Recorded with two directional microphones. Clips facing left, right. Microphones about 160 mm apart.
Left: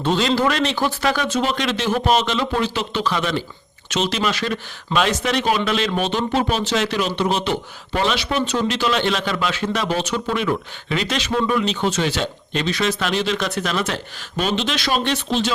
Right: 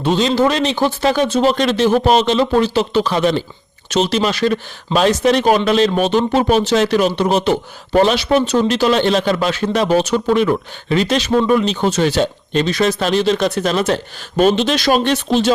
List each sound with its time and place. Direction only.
0.0 s a man's voice: 20° right (ahead or behind); by 15.5 s 45° right (ahead or behind)